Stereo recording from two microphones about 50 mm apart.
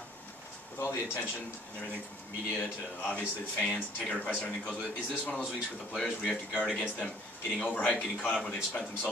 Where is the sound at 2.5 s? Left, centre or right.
Left; by 6.6 s centre.